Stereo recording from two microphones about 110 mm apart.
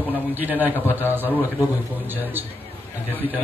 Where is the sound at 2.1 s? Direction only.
15° right (ahead or behind).